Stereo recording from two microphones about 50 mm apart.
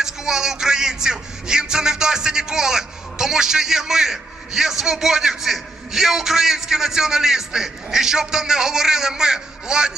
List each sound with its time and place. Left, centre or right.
0.0 s speech: centre